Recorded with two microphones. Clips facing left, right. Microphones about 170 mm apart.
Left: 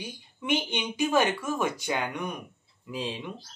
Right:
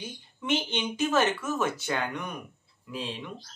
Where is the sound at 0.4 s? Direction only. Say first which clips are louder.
Even; 10° left (ahead or behind).